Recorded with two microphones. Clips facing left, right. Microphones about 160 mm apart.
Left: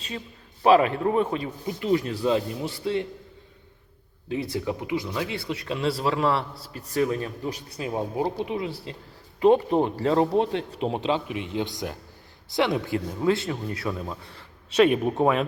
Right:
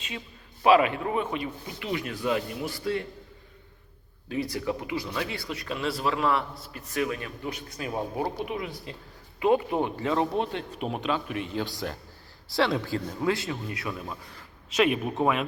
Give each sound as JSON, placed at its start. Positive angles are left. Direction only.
{"t": 0.6, "sound": "a man's voice", "side_deg": 35}
{"t": 4.3, "sound": "a man's voice", "side_deg": 25}
{"t": 11.3, "sound": "a man's voice", "side_deg": 20}